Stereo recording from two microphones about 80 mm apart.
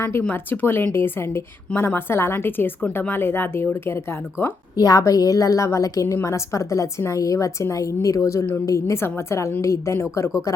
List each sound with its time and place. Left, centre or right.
0.2 s a woman's voice: left
4.8 s a woman's voice: left